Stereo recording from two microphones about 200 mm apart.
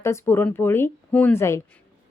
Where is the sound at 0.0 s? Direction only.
15° left (ahead or behind).